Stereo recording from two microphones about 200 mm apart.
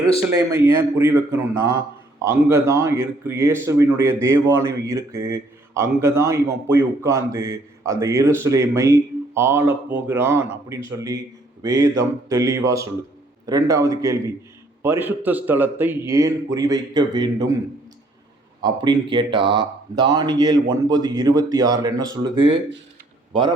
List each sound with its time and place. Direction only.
0.5 s a man's voice: 15° right (ahead or behind)
18.6 s speech: 20° right (ahead or behind)